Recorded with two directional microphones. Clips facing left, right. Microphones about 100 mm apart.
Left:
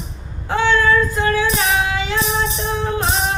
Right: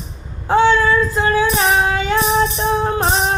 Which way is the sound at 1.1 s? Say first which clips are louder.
Right 2 dB; 30° right (ahead or behind).